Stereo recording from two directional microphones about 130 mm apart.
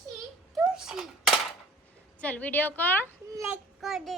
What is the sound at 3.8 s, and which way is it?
Speech, centre (ahead or behind).